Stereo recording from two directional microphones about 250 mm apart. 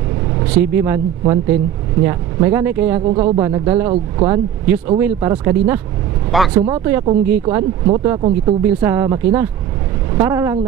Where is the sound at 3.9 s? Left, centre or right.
Right.